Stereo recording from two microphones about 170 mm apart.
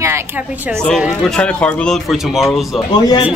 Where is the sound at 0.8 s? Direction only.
Centre (ahead or behind).